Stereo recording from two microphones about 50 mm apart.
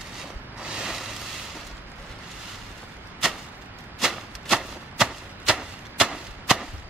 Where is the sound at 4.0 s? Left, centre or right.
Centre.